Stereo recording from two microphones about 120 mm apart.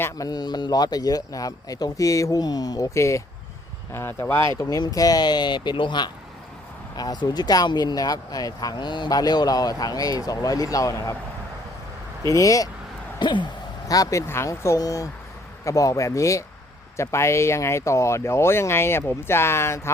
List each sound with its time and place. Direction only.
0.0 s speech: 30° left (ahead or behind)
12.3 s speech: 30° left (ahead or behind)
13.1 s speech: 40° left (ahead or behind); by 19.9 s 20° left (ahead or behind)